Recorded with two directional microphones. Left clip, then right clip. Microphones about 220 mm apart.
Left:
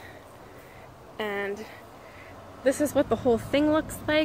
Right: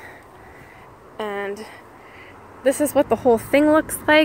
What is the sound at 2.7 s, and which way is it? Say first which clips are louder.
Speech: right 6 dB; 25° right (ahead or behind).